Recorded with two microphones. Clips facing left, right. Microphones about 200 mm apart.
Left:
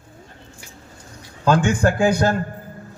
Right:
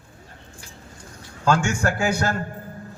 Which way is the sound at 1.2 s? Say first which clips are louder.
Left 3 dB; 15° left (ahead or behind).